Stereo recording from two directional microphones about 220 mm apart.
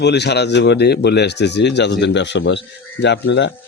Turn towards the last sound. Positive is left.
turn(degrees=50)  # may be behind; listen again after turning